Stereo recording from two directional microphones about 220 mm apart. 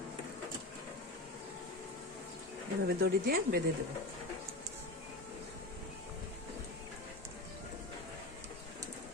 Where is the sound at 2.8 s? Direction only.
45° right (ahead or behind).